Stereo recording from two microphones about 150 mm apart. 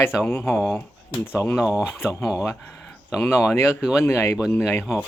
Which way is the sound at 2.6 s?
5° left (ahead or behind).